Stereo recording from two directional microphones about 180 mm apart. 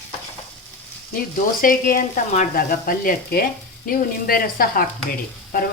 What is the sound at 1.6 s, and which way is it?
Speech, 50° left (ahead or behind).